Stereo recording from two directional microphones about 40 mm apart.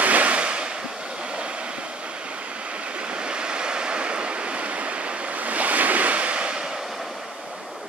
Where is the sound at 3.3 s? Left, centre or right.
Right.